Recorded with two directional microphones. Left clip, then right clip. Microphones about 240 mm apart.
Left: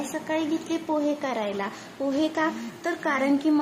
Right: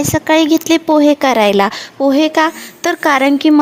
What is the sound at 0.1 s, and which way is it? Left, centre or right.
Speech, right.